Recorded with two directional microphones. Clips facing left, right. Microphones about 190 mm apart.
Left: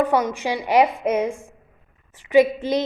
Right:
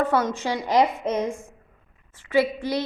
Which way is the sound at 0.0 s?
15° left (ahead or behind).